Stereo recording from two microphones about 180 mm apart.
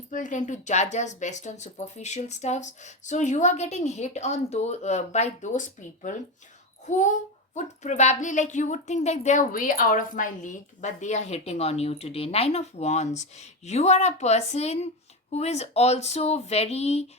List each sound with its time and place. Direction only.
0.1 s a woman's voice: 45° left (ahead or behind)